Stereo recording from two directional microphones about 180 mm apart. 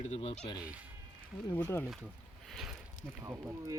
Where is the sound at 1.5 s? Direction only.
15° left (ahead or behind).